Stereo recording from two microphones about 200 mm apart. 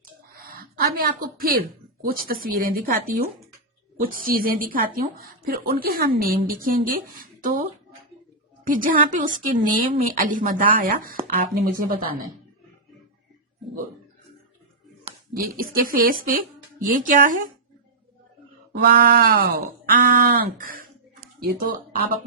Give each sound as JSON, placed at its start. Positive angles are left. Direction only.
{"t": 0.4, "sound": "a woman's voice", "side_deg": -45}
{"t": 8.6, "sound": "a woman's voice", "side_deg": -40}
{"t": 15.4, "sound": "a woman's voice", "side_deg": -45}
{"t": 18.7, "sound": "a woman's voice", "side_deg": -50}